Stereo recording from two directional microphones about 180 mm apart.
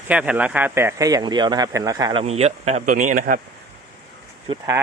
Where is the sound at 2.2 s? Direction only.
35° right (ahead or behind).